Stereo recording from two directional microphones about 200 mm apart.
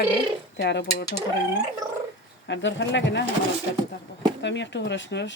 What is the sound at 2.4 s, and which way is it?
Speech, 65° left (ahead or behind).